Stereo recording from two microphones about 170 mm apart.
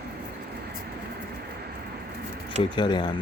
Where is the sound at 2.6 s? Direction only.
25° left (ahead or behind).